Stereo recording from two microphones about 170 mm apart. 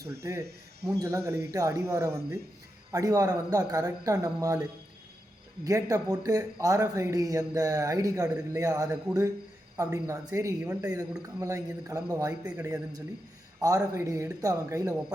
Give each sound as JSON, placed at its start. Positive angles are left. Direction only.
{"t": 0.1, "sound": "a man's voice", "side_deg": -15}
{"t": 5.6, "sound": "a man's voice", "side_deg": -20}